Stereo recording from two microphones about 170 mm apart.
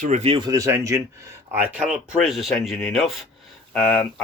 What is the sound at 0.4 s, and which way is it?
Speech, 20° right (ahead or behind).